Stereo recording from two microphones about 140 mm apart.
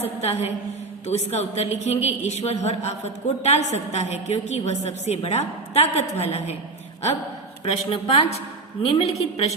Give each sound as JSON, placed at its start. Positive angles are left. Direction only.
{"t": 0.0, "sound": "speech", "side_deg": 50}
{"t": 7.6, "sound": "speech", "side_deg": 45}